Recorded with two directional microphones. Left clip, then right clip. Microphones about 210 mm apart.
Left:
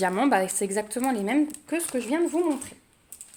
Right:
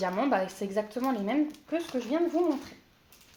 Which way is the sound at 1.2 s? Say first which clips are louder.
Left 4 dB; 50° left (ahead or behind).